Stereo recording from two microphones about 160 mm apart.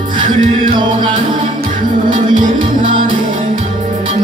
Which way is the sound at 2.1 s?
55° right (ahead or behind).